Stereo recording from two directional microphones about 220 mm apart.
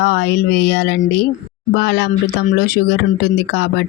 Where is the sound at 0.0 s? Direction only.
50° left (ahead or behind).